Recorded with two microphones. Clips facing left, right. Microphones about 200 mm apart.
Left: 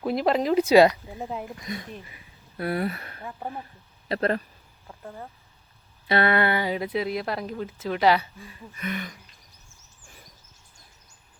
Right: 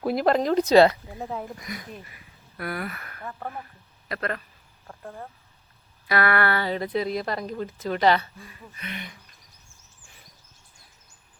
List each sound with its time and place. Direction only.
0.0 s a woman's voice: centre (ahead or behind)
1.6 s speech: 25° left (ahead or behind)
6.1 s a woman's voice: 25° left (ahead or behind); by 8.3 s 5° left (ahead or behind)
8.8 s a sound: 45° left (ahead or behind)